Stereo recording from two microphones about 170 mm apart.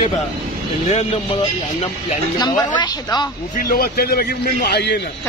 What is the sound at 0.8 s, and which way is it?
Speech, 40° left (ahead or behind).